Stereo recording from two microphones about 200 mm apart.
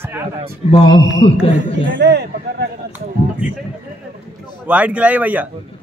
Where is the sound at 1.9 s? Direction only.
60° right (ahead or behind).